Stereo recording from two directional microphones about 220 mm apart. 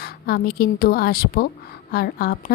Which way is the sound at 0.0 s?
45° left (ahead or behind).